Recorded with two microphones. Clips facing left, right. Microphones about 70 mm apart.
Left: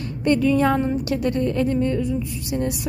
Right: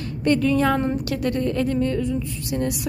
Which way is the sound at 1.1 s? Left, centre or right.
Left.